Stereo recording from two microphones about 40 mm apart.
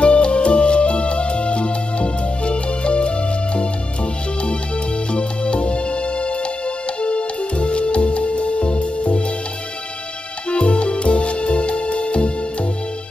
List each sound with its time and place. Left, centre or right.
0.0 s music: left
5.1 s music: left
10.5 s music: left